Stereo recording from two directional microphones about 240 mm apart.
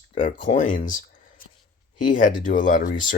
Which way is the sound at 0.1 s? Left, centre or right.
Left.